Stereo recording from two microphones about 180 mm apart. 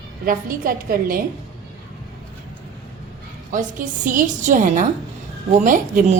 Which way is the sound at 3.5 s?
45° right (ahead or behind).